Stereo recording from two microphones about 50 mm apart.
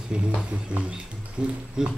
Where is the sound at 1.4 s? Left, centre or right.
Centre.